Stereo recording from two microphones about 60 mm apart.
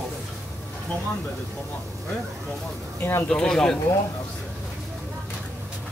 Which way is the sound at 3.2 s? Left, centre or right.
Centre.